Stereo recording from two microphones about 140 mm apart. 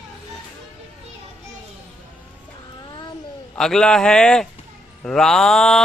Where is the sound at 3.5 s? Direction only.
5° left (ahead or behind).